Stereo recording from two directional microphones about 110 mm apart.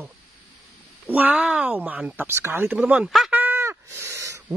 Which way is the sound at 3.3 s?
15° right (ahead or behind).